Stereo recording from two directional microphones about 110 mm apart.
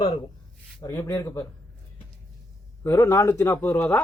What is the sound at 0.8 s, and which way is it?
Speech, 25° left (ahead or behind).